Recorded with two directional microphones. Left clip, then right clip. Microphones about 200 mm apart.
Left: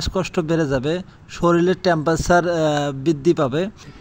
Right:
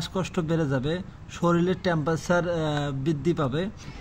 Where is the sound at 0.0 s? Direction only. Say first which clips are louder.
Left 7 dB; 30° left (ahead or behind).